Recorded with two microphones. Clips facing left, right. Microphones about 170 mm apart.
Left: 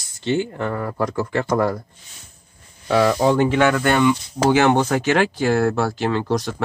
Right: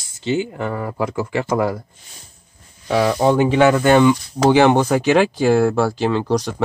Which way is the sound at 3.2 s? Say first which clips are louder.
Right 2 dB; 10° right (ahead or behind).